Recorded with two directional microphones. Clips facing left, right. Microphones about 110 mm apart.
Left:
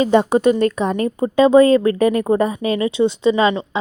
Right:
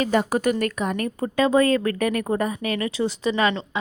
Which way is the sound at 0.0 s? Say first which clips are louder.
Left 7 dB; 25° left (ahead or behind).